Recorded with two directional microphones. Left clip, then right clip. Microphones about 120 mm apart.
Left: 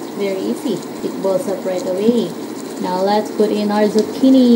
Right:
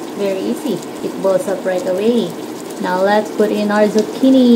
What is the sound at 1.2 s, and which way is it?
Speech, 15° right (ahead or behind).